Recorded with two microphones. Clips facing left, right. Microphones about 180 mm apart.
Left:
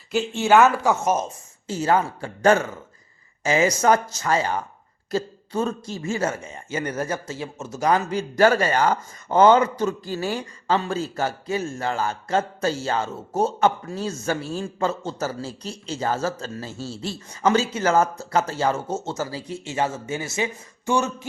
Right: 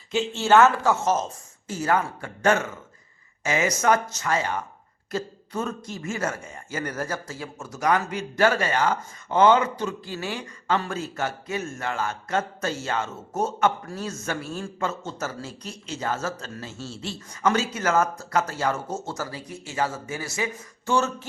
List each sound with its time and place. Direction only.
0.1 s speech: 10° left (ahead or behind)
1.6 s a man's voice: 30° left (ahead or behind)